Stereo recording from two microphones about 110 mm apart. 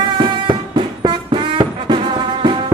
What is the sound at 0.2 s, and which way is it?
Music, 45° right (ahead or behind).